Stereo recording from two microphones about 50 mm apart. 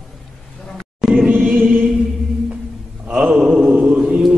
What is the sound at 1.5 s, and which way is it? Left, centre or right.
Chant, right.